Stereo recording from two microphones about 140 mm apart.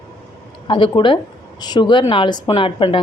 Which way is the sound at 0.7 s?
35° left (ahead or behind).